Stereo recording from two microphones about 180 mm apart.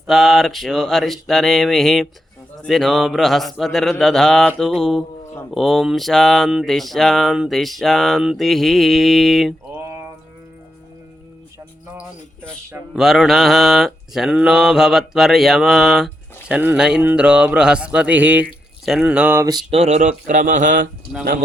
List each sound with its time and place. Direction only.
0.1 s mantra: centre (ahead or behind)
9.7 s a sound: 15° right (ahead or behind)
11.9 s a sound: 15° right (ahead or behind)
13.0 s mantra: centre (ahead or behind)
18.9 s speech: 5° right (ahead or behind)
19.7 s speech: 40° right (ahead or behind)